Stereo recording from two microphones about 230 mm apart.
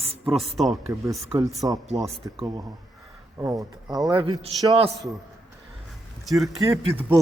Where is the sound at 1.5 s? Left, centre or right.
Centre.